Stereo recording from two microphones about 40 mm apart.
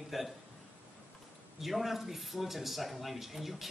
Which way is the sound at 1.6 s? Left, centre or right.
Centre.